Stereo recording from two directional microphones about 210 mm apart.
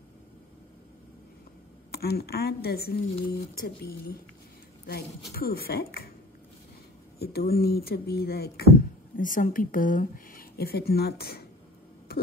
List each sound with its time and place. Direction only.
1.9 s speech: 50° left (ahead or behind)
5.3 s speech: 45° left (ahead or behind)
7.2 s speech: 45° left (ahead or behind)
12.1 s a sound: 50° left (ahead or behind)